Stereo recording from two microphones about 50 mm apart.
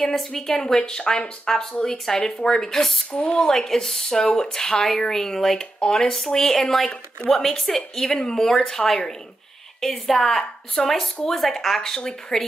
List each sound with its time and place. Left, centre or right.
0.0 s speech: centre
3.1 s speech: left
3.3 s a woman's voice: centre